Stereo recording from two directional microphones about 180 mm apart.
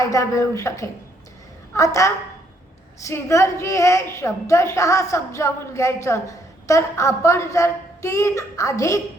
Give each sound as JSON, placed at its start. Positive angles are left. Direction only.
{"t": 0.0, "sound": "a woman's voice", "side_deg": 20}